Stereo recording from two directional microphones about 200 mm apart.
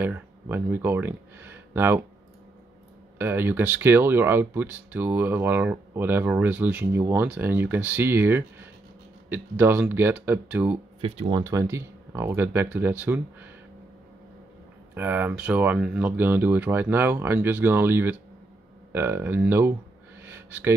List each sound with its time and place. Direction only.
0.0 s speech: 10° right (ahead or behind)
3.2 s speech: 10° right (ahead or behind)
11.0 s speech: 30° right (ahead or behind)
11.4 s speech: 15° right (ahead or behind)
15.0 s speech: 10° right (ahead or behind)
20.2 s a sound: 10° right (ahead or behind)